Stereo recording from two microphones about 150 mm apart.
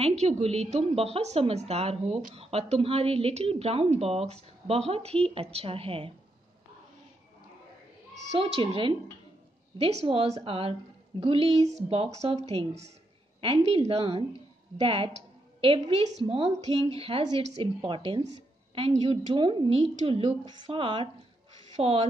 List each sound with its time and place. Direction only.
0.2 s a woman's voice: 45° right (ahead or behind)
8.1 s a woman's voice: 40° right (ahead or behind)
17.8 s a woman's voice: 35° right (ahead or behind)
19.3 s a woman's voice: 35° right (ahead or behind)